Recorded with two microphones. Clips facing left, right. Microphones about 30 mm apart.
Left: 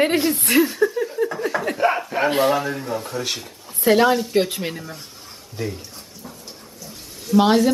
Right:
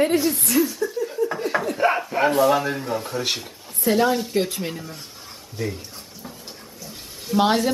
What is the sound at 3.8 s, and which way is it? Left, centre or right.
Speech, left.